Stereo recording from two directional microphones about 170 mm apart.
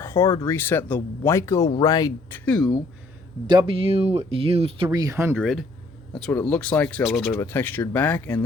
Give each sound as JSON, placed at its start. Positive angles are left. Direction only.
{"t": 0.0, "sound": "speech", "side_deg": 15}
{"t": 2.4, "sound": "speech", "side_deg": 5}
{"t": 3.4, "sound": "speech", "side_deg": -25}
{"t": 4.9, "sound": "speech", "side_deg": -20}
{"t": 5.3, "sound": "speech", "side_deg": 0}